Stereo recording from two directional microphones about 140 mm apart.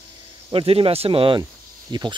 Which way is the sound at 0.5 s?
40° right (ahead or behind).